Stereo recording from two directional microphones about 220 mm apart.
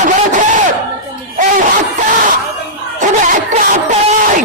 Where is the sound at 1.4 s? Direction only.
35° right (ahead or behind).